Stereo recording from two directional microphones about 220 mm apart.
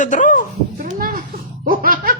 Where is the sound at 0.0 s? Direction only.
35° left (ahead or behind).